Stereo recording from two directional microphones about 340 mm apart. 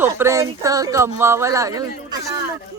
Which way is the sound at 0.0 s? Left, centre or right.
Centre.